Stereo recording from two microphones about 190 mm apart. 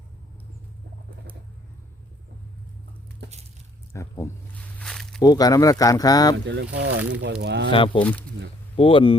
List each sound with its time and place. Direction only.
3.9 s speech: 15° left (ahead or behind)
4.8 s a sound: centre (ahead or behind)
5.2 s speech: 20° left (ahead or behind)
6.3 s speech: 70° right (ahead or behind)
7.7 s speech: 25° left (ahead or behind)